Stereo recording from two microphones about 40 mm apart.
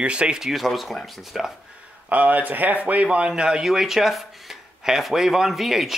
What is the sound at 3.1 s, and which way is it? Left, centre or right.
Speech, right.